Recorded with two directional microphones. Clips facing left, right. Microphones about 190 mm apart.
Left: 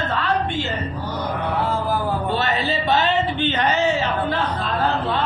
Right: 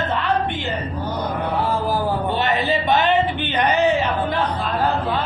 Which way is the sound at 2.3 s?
15° right (ahead or behind).